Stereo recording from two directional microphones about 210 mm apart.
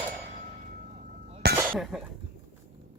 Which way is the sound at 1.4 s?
50° right (ahead or behind).